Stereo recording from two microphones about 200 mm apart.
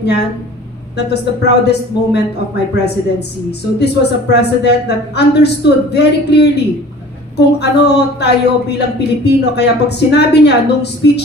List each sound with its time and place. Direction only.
0.9 s a woman's voice: 55° left (ahead or behind)